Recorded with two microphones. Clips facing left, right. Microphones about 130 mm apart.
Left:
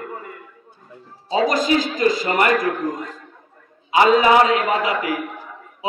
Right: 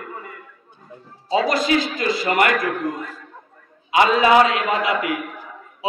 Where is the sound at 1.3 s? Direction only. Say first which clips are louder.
Left 1 dB; 45° left (ahead or behind).